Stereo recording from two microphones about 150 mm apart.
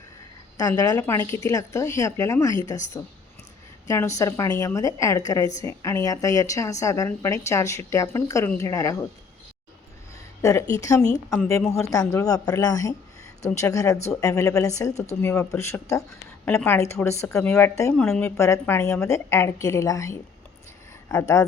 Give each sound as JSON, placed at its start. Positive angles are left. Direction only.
{"t": 0.8, "sound": "a woman's voice", "side_deg": 25}
{"t": 10.4, "sound": "a woman's voice", "side_deg": 20}
{"t": 18.3, "sound": "a woman's voice", "side_deg": 20}